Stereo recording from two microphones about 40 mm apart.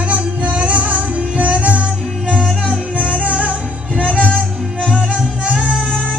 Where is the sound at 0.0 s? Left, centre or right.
Right.